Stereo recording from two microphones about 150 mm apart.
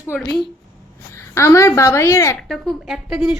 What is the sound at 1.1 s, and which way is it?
A woman's voice, 20° left (ahead or behind).